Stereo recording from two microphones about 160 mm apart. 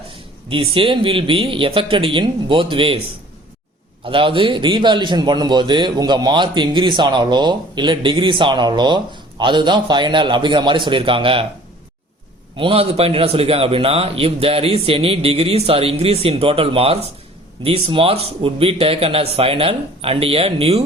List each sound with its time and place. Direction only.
0.1 s a man's voice: 35° right (ahead or behind)
4.0 s a man's voice: 35° right (ahead or behind)
12.5 s a man's voice: 35° right (ahead or behind)